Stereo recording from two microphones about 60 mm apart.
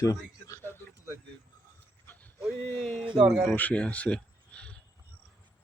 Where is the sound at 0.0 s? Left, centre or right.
Left.